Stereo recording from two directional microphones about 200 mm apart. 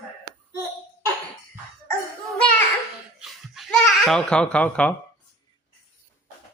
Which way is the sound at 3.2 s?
Centre (ahead or behind).